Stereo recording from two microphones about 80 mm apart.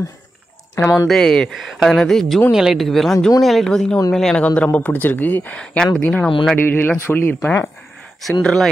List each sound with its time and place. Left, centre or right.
0.7 s speech: left
1.0 s speech: centre
4.4 s speech: centre
6.5 s speech: left
8.2 s speech: centre